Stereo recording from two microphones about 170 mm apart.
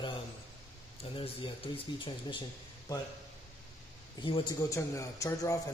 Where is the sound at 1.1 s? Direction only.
30° left (ahead or behind).